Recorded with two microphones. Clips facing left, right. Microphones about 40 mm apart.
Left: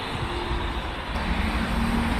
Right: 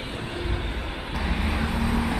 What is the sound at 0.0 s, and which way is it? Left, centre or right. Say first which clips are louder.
Vehicle: left 3 dB; left.